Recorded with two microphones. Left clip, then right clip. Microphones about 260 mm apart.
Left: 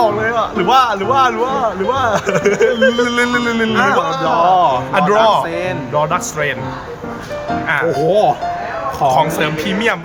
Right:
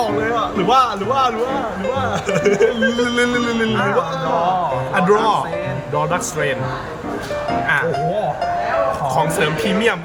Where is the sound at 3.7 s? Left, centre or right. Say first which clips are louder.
Left 8 dB; left.